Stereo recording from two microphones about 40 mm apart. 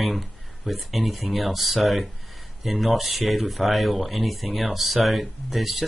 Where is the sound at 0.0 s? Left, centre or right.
Centre.